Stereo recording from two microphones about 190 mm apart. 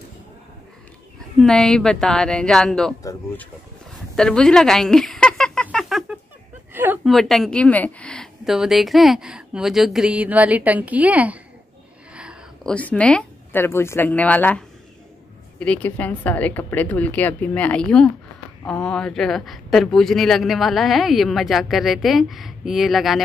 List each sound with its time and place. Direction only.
1.4 s speech: centre (ahead or behind)
3.0 s a woman's voice: 15° left (ahead or behind)
4.1 s a sound: 5° left (ahead or behind)
7.1 s speech: centre (ahead or behind)
12.2 s a sound: 5° right (ahead or behind)
12.7 s a woman's voice: 5° left (ahead or behind)
15.6 s a woman's voice: 5° left (ahead or behind)